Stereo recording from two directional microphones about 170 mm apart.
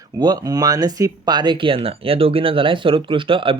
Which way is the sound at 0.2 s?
25° right (ahead or behind).